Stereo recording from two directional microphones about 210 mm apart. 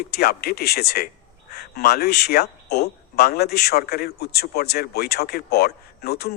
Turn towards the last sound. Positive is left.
turn(degrees=50)  # may be behind; listen again after turning